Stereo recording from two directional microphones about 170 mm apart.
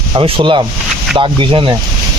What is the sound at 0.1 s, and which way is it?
Speech, 30° right (ahead or behind).